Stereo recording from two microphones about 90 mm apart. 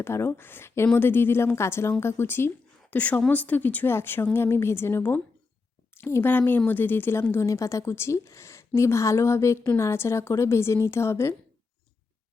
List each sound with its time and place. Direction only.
0.0 s a woman's voice: 25° left (ahead or behind)